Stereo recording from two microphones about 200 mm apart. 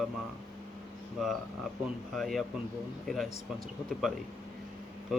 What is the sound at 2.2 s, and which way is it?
Speech, centre (ahead or behind).